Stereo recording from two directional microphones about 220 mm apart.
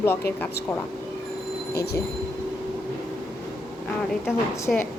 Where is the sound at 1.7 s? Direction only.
45° left (ahead or behind).